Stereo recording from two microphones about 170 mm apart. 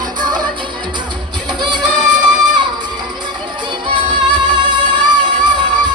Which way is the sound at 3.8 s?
30° right (ahead or behind).